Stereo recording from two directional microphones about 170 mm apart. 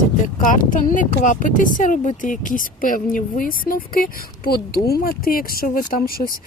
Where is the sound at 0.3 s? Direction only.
50° left (ahead or behind).